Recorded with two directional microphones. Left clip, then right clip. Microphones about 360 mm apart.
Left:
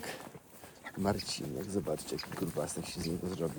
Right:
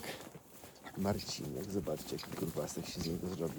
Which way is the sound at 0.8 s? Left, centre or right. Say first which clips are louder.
Left 4 dB; left.